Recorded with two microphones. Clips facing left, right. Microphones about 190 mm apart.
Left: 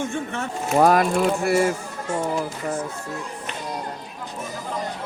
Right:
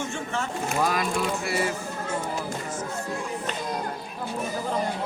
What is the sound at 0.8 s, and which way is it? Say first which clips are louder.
Speech: left 9 dB; 55° left (ahead or behind).